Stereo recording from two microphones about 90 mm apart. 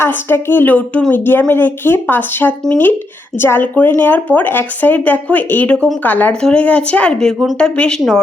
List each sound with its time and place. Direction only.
0.0 s a woman's voice: 25° left (ahead or behind); by 8.2 s 5° left (ahead or behind)